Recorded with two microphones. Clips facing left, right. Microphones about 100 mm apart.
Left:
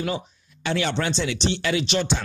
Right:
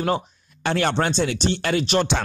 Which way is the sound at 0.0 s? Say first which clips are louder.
Right 5 dB; 50° right (ahead or behind).